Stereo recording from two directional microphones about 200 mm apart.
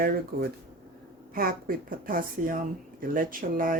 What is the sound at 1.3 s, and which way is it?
Speech, 45° right (ahead or behind).